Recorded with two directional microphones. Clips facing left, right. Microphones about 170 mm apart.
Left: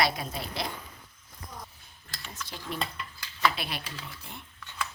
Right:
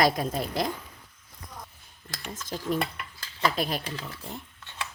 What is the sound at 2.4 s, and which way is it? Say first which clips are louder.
A woman's voice: right 7 dB; 45° right (ahead or behind).